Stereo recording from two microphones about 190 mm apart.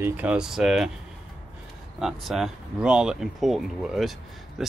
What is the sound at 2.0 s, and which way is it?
Speech, centre (ahead or behind).